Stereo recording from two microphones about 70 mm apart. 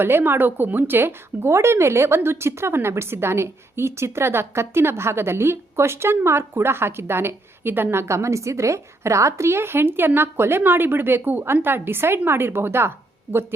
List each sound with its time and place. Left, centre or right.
0.0 s speech: right